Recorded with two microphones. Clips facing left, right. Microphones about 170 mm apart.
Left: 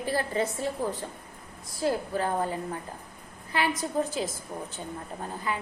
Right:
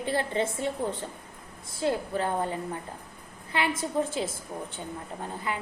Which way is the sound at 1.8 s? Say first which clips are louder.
Even; 25° right (ahead or behind).